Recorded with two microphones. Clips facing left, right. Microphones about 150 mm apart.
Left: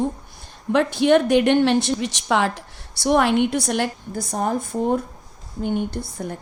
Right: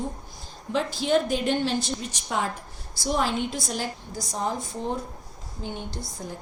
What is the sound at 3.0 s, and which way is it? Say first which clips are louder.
A woman's voice: left 8 dB; 65° left (ahead or behind).